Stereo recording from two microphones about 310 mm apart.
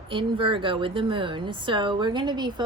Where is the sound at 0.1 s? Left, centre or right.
Centre.